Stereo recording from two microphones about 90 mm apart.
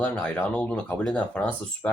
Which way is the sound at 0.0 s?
15° left (ahead or behind).